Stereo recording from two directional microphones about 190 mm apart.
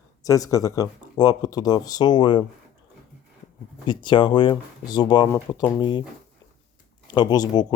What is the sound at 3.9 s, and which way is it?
Speech, 25° left (ahead or behind).